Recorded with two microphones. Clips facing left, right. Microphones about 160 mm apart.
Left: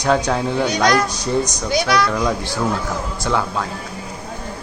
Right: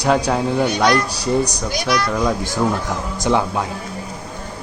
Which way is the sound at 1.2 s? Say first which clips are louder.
Right 1 dB; 35° right (ahead or behind).